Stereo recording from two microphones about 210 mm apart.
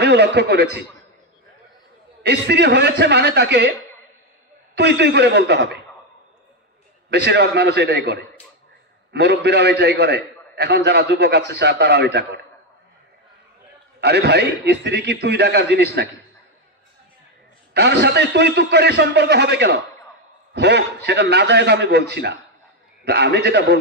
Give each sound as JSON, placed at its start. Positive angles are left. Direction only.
{"t": 0.0, "sound": "a man's voice", "side_deg": -55}
{"t": 2.2, "sound": "a man's voice", "side_deg": -55}
{"t": 4.7, "sound": "a man's voice", "side_deg": -55}
{"t": 7.1, "sound": "a man's voice", "side_deg": -55}
{"t": 14.0, "sound": "a man's voice", "side_deg": -55}
{"t": 17.7, "sound": "a man's voice", "side_deg": -55}